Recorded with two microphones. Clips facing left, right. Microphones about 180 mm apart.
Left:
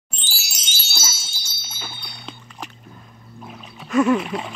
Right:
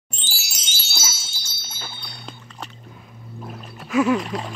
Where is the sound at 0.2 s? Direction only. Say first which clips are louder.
Left 1 dB; 70° left (ahead or behind).